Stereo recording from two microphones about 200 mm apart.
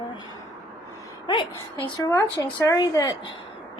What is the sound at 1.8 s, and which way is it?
Speech, 20° left (ahead or behind).